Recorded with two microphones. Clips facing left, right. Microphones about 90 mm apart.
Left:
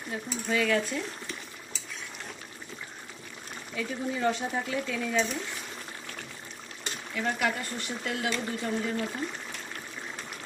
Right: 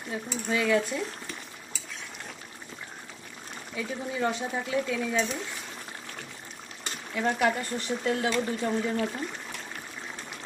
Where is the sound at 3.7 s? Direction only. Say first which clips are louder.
Even; 10° right (ahead or behind).